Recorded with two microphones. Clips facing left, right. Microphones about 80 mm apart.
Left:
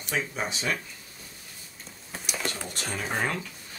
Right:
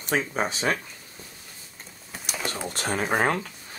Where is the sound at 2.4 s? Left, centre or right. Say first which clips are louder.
Right 4 dB; centre.